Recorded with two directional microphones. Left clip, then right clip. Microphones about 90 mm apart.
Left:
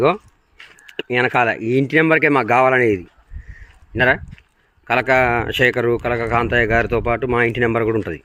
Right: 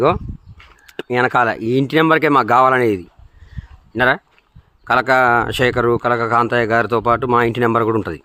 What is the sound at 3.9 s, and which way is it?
Speech, 35° right (ahead or behind).